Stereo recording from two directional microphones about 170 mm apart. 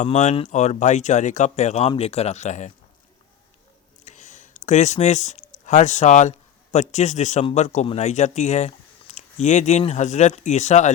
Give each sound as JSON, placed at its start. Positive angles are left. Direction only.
{"t": 0.0, "sound": "speech", "side_deg": 45}
{"t": 4.0, "sound": "speech", "side_deg": 45}